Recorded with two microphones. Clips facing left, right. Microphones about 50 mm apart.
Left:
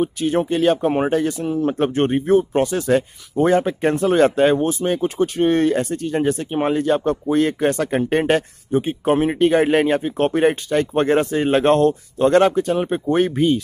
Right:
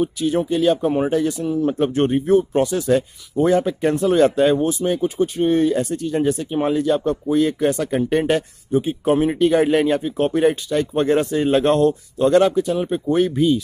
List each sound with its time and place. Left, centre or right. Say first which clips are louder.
0.0 s speech: even; left
5.0 s speech: left 2 dB; left
5.8 s speech: even; left